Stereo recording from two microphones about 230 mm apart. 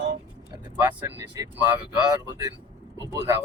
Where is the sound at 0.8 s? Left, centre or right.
Centre.